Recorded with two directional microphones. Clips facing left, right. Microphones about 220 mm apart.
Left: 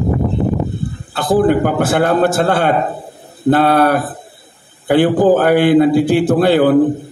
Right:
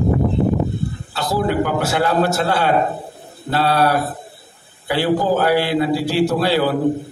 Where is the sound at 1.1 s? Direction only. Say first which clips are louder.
Left 7 dB; 50° left (ahead or behind).